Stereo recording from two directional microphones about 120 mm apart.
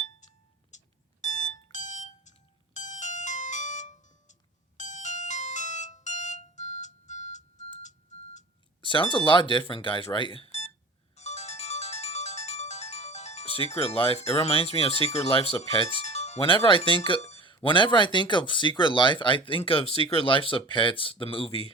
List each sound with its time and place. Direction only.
0.7 s fire alarm: 80° left
1.2 s alarm: 80° left
2.7 s ringtone: 90° left
7.8 s music: 80° left
8.8 s speech: 45° left (ahead or behind); by 10.7 s 60° left (ahead or behind)
11.1 s ringtone: 65° left (ahead or behind); by 16.0 s 50° left (ahead or behind)
16.0 s music: 65° left (ahead or behind)
16.6 s speech: 45° left (ahead or behind)
17.2 s a sound: 60° left (ahead or behind)
17.4 s speech: 45° left (ahead or behind)